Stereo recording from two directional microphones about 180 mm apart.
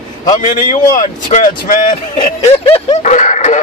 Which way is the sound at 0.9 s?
45° left (ahead or behind).